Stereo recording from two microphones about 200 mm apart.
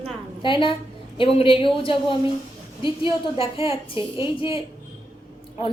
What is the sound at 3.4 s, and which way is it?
Speech, 30° left (ahead or behind).